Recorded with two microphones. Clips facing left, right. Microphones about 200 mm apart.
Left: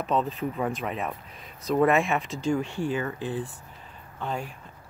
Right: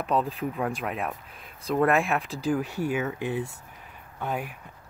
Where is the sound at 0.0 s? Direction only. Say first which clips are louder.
Even; centre (ahead or behind).